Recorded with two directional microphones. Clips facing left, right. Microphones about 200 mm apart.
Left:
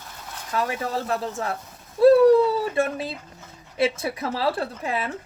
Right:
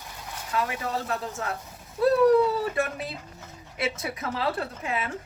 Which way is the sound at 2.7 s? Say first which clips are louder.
Left 4 dB; 30° left (ahead or behind).